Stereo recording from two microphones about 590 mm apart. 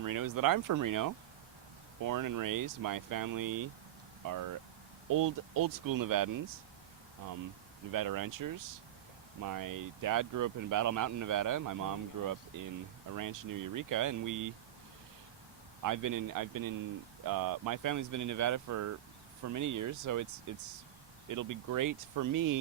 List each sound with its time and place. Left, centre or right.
0.0 s speech: right
7.9 s speech: right
15.8 s speech: right